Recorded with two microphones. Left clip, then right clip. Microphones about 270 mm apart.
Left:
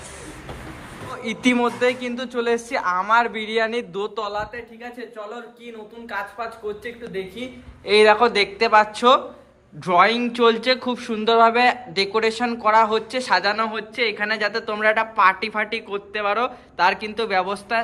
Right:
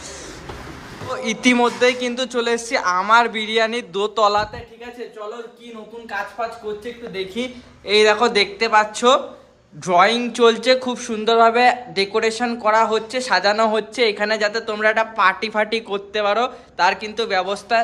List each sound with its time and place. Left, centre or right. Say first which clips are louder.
1.1 s a man's voice: right 4 dB; centre
7.4 s speech: right 7 dB; right
7.9 s a man's voice: even; centre